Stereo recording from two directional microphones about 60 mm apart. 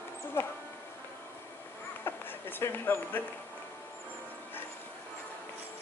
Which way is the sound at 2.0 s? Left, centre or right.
Left.